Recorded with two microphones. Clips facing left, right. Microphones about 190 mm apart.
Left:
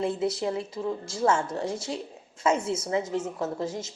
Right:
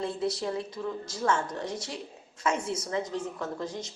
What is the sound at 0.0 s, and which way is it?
Speech, 25° left (ahead or behind).